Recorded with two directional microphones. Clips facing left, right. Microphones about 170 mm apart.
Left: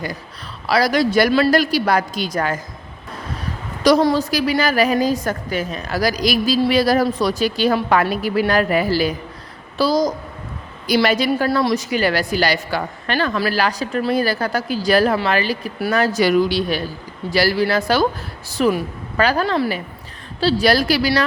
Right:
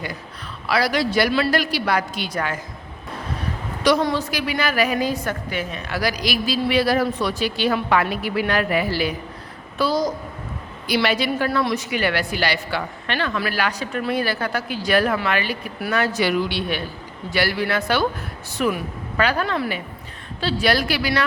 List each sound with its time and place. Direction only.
0.7 s a woman's voice: 40° left (ahead or behind)
3.8 s a woman's voice: 35° left (ahead or behind)